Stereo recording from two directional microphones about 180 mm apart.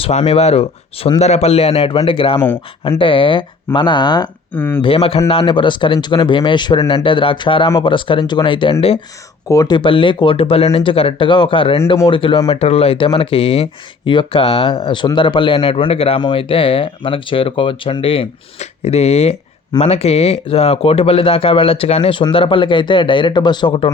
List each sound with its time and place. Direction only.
0.0 s speech: 35° left (ahead or behind)
4.5 s speech: 10° left (ahead or behind)
4.8 s speech: 30° left (ahead or behind)